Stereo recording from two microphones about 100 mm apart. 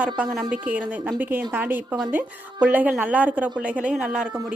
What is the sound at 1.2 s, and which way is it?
A woman's voice, 20° right (ahead or behind).